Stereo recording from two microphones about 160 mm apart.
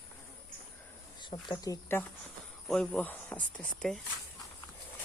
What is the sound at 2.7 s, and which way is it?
Speech, 5° left (ahead or behind).